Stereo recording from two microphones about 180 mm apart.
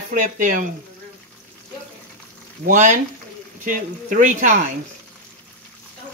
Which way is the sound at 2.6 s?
45° right (ahead or behind).